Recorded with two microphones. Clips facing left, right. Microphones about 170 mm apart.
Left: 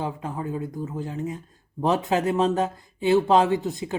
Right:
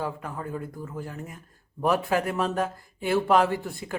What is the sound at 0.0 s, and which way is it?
Speech, 20° left (ahead or behind).